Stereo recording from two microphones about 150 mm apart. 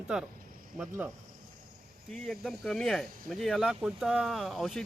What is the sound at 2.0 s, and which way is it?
Speech, centre (ahead or behind).